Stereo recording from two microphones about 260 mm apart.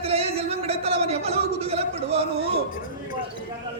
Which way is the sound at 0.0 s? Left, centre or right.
Right.